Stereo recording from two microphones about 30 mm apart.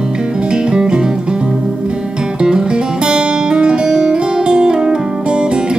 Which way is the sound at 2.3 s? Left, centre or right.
Right.